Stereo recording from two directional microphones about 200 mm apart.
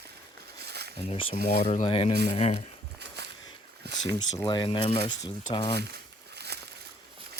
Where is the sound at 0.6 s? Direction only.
55° right (ahead or behind).